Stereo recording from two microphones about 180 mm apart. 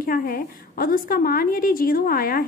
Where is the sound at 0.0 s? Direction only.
50° left (ahead or behind).